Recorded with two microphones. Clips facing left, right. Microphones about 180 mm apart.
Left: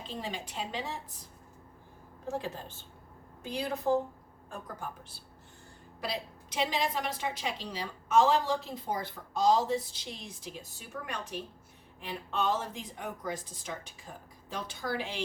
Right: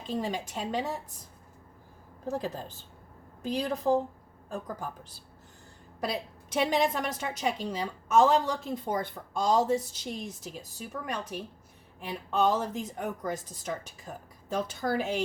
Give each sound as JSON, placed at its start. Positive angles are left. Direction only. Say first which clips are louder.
{"t": 0.1, "sound": "a woman's voice", "louder": "right 8 dB", "side_deg": -45}
{"t": 2.2, "sound": "speech", "louder": "right 3 dB", "side_deg": -40}
{"t": 6.0, "sound": "a woman's voice", "louder": "right 4 dB", "side_deg": -50}